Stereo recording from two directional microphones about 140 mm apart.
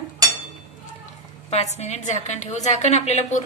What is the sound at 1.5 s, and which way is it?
A woman's voice, 50° left (ahead or behind).